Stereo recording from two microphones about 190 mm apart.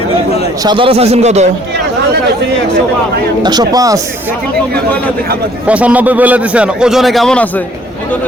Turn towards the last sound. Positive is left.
turn(degrees=5)  # may be behind; listen again after turning